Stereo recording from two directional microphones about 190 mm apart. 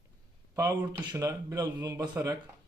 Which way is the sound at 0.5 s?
15° right (ahead or behind).